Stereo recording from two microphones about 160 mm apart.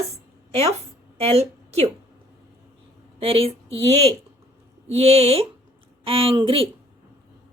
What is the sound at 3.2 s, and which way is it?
A woman's voice, 35° right (ahead or behind).